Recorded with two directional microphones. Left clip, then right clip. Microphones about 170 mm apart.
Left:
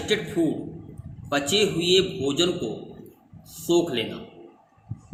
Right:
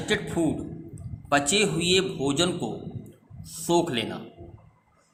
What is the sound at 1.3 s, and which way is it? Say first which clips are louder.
A man's voice: even; 50° right (ahead or behind).